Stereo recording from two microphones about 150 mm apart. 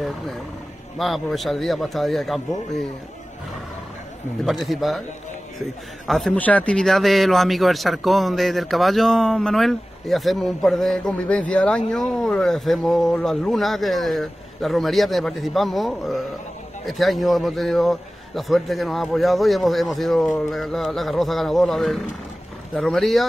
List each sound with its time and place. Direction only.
0.9 s a man's voice: centre (ahead or behind)
4.5 s a man's voice: centre (ahead or behind)